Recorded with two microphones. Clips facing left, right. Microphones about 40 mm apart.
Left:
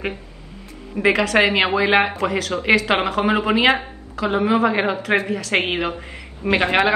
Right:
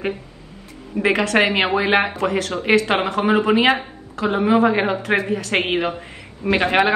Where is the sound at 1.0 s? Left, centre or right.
Centre.